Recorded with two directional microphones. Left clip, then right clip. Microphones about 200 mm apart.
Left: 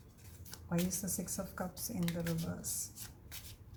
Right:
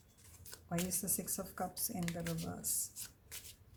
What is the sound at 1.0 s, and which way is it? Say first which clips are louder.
Speech: left 1 dB; 40° right (ahead or behind).